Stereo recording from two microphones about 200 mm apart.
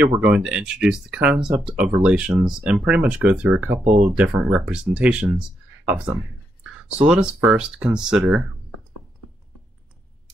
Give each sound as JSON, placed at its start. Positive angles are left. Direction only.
{"t": 0.0, "sound": "speech", "side_deg": -5}
{"t": 3.8, "sound": "speech", "side_deg": -40}
{"t": 4.2, "sound": "speech", "side_deg": -5}